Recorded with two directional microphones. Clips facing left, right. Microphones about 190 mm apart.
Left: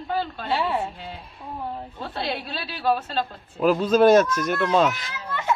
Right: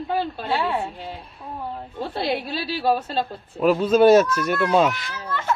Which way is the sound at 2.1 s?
10° right (ahead or behind).